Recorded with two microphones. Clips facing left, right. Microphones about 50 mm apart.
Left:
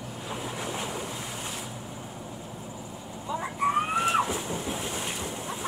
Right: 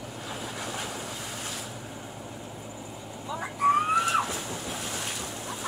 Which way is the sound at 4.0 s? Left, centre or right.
Left.